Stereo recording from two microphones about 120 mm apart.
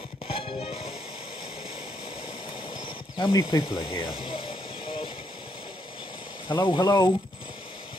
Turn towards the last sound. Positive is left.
turn(degrees=30)  # may be behind; listen again after turning